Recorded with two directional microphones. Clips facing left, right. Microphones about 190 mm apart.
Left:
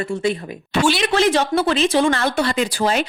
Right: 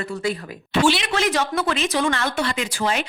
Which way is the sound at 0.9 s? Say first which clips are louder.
Left 5 dB; 35° left (ahead or behind).